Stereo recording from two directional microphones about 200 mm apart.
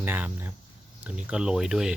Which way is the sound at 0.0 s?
10° right (ahead or behind).